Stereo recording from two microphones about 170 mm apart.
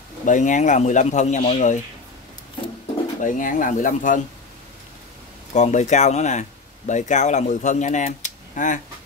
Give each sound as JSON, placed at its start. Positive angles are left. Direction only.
{"t": 0.2, "sound": "speech", "side_deg": 50}
{"t": 3.2, "sound": "speech", "side_deg": 50}
{"t": 5.5, "sound": "speech", "side_deg": 45}